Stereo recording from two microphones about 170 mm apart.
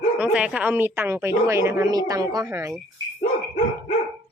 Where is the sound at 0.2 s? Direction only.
5° right (ahead or behind).